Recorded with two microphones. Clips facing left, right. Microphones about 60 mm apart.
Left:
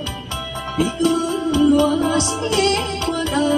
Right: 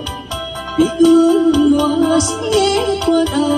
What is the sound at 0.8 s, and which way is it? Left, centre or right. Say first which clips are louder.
Music: right 9 dB; left.